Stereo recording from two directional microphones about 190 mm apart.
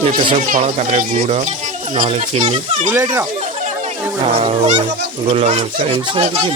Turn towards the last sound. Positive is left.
turn(degrees=-30)  # may be behind; listen again after turning